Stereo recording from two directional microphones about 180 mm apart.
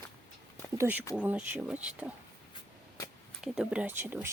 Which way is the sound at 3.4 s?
5° right (ahead or behind).